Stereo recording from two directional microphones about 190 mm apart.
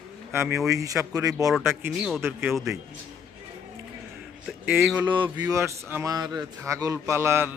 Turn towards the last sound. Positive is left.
turn(degrees=-15)  # may be behind; listen again after turning